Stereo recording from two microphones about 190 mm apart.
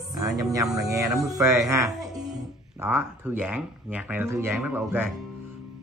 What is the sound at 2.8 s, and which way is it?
Speech, 10° right (ahead or behind).